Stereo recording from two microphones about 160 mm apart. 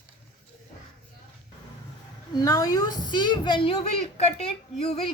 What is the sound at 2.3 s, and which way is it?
A woman's voice, 20° left (ahead or behind).